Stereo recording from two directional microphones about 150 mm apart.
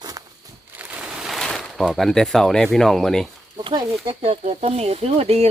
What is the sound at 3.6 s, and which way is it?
Speech, 35° right (ahead or behind).